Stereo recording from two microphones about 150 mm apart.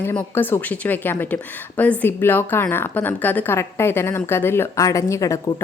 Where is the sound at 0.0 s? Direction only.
15° left (ahead or behind).